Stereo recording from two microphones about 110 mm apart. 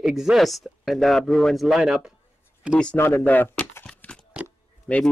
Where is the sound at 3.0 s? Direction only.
20° left (ahead or behind).